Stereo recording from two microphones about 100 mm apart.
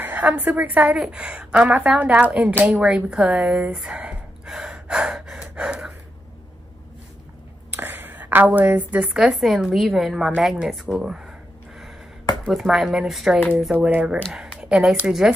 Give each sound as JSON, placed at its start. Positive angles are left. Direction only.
{"t": 0.0, "sound": "a woman's voice", "side_deg": -20}
{"t": 3.1, "sound": "gasp", "side_deg": -5}
{"t": 7.7, "sound": "a sound", "side_deg": -20}
{"t": 9.1, "sound": "a woman's voice", "side_deg": 0}
{"t": 12.4, "sound": "a woman's voice", "side_deg": -5}